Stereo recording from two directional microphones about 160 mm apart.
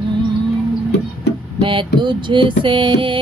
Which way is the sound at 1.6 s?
30° right (ahead or behind).